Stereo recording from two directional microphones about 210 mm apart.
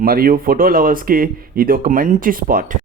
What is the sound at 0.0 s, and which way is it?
Speech, 45° right (ahead or behind).